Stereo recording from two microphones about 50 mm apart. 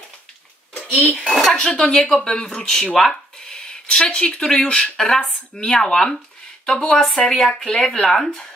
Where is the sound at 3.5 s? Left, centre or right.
Centre.